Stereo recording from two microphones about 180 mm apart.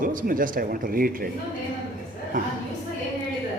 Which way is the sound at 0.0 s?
50° right (ahead or behind).